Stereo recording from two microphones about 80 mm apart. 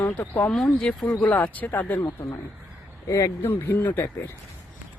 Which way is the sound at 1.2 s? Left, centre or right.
Centre.